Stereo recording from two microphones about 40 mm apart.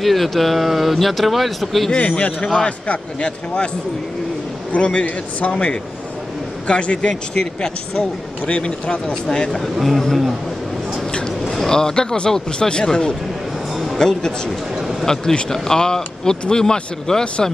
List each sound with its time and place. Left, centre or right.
0.0 s speech: centre
2.0 s speech: left
4.7 s speech: left
6.7 s speech: left
9.6 s speech: centre
11.1 s a sound: left
11.6 s speech: centre